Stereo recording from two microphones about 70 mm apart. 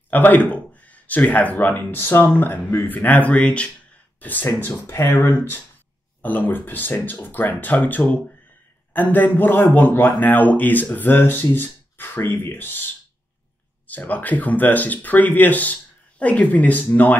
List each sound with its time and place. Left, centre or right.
0.1 s speech: left